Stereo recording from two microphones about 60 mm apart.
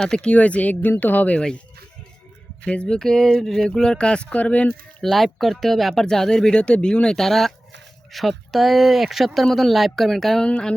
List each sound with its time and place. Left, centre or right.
0.0 s speech: centre
1.4 s speech: centre
5.0 s speech: centre
10.4 s speech: centre